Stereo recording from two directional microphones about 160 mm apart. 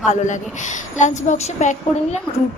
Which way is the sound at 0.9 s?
50° left (ahead or behind).